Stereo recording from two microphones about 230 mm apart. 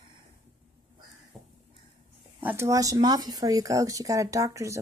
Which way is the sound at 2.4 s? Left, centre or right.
Centre.